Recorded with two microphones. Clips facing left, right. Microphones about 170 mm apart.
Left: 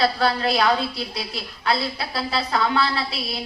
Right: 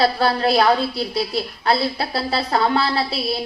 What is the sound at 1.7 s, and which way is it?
A woman's voice, 30° right (ahead or behind).